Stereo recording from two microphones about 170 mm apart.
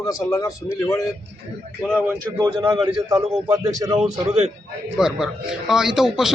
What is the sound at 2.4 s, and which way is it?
A man's voice, 25° right (ahead or behind).